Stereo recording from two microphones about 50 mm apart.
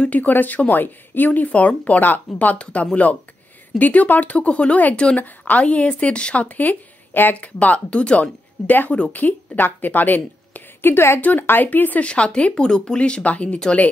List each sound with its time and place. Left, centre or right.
0.0 s a woman's voice: left
11.1 s speech: left
12.1 s a woman's voice: left